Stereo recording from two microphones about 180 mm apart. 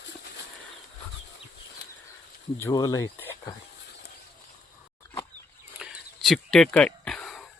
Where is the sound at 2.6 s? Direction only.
20° left (ahead or behind).